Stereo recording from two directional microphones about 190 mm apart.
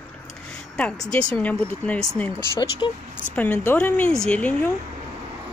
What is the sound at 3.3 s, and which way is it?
Speech, 10° left (ahead or behind).